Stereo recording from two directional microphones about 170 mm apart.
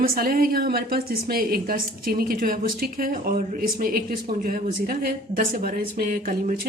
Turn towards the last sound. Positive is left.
turn(degrees=-55)  # may be behind; listen again after turning